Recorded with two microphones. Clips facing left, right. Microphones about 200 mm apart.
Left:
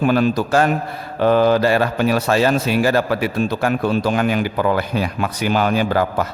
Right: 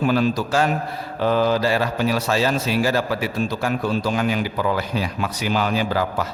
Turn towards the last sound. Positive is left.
turn(degrees=55)  # may be behind; listen again after turning